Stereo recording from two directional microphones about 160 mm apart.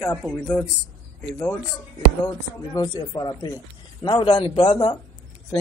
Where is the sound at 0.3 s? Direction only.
5° left (ahead or behind).